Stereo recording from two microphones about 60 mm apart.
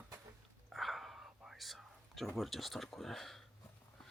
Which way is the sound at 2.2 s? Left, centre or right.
Centre.